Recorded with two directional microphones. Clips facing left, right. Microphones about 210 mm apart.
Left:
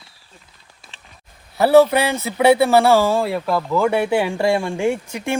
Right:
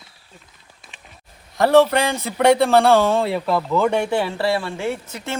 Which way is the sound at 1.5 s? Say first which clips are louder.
Left 2 dB; 5° left (ahead or behind).